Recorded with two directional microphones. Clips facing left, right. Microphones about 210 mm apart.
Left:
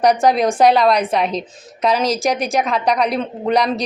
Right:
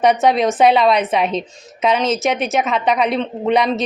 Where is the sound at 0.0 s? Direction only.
Centre (ahead or behind).